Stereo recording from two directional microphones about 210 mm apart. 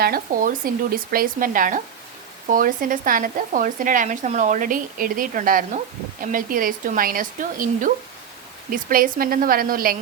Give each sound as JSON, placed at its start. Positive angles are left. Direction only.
{"t": 0.0, "sound": "speech", "side_deg": -45}